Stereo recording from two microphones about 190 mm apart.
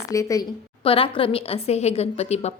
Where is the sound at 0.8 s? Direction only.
30° left (ahead or behind).